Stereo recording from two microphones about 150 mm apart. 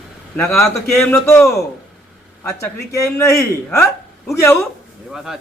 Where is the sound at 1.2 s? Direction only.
15° left (ahead or behind).